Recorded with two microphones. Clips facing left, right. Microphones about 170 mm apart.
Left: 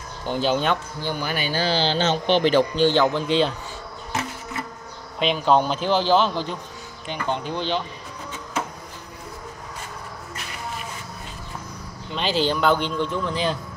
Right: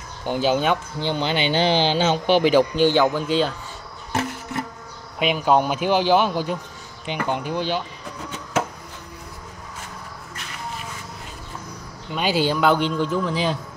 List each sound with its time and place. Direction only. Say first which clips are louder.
0.3 s speech: right 2 dB; 10° right (ahead or behind)
0.9 s speech: right 4 dB; 20° right (ahead or behind); by 3.5 s 5° right (ahead or behind)
5.2 s speech: even; 10° right (ahead or behind)
12.1 s speech: right 2 dB; 10° right (ahead or behind)